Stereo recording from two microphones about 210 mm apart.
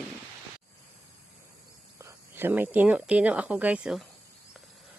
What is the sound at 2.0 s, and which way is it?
Speech, 10° right (ahead or behind).